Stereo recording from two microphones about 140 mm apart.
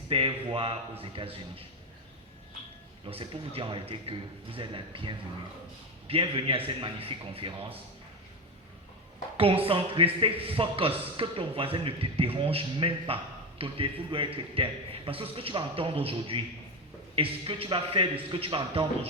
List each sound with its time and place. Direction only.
0.1 s a man's voice: 40° right (ahead or behind)
3.1 s a man's voice: 45° right (ahead or behind)
9.4 s a man's voice: 40° right (ahead or behind)